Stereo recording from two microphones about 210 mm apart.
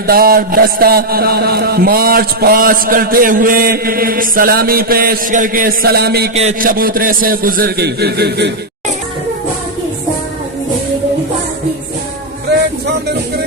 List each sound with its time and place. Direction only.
0.1 s a man's voice: 45° right (ahead or behind)
6.3 s a man's voice: 35° right (ahead or behind); by 8.5 s 50° right (ahead or behind)